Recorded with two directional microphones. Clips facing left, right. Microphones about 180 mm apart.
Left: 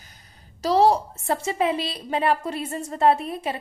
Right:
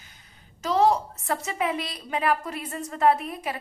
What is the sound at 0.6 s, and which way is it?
A woman's voice, 35° left (ahead or behind).